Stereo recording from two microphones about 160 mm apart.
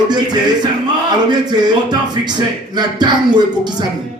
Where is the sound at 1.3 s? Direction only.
25° right (ahead or behind).